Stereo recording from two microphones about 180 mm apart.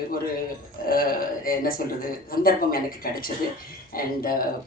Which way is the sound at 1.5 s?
55° left (ahead or behind).